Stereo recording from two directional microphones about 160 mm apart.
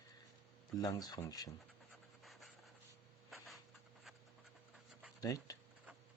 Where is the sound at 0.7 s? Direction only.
25° left (ahead or behind).